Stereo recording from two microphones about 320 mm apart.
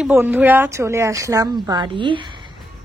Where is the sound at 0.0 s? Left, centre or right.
Centre.